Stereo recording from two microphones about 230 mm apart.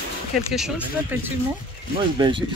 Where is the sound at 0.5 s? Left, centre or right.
Centre.